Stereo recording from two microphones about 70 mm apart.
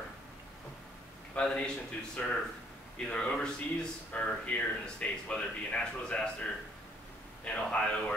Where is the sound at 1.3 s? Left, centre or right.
Centre.